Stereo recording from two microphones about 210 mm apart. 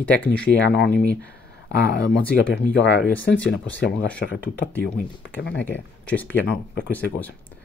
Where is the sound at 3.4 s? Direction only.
60° left (ahead or behind).